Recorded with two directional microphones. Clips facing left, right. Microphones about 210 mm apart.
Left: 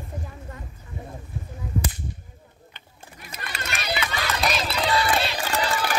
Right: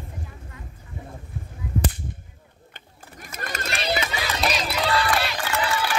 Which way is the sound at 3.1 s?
45° right (ahead or behind).